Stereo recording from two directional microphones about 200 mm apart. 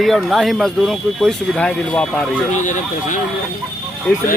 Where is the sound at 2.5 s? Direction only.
40° left (ahead or behind).